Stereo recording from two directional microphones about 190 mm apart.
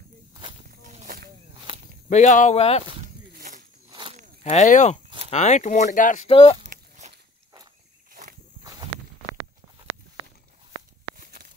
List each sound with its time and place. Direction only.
0.3 s walk: 25° right (ahead or behind)
0.7 s walk: 45° right (ahead or behind)
2.0 s speech: 40° left (ahead or behind)
3.3 s a sound: 50° right (ahead or behind)
3.9 s walk: 25° right (ahead or behind)
4.4 s speech: 35° left (ahead or behind)
6.2 s speech: 30° left (ahead or behind)
6.6 s biting: 40° right (ahead or behind)
8.1 s walk: 45° right (ahead or behind)